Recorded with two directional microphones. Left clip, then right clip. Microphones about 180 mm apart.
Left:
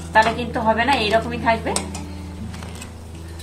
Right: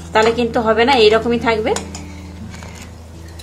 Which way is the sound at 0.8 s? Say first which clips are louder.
Right 10 dB; 55° right (ahead or behind).